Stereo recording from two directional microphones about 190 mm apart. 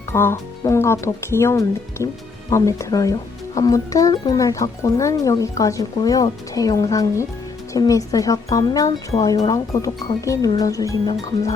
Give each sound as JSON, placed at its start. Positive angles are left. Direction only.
{"t": 0.1, "sound": "speech", "side_deg": 15}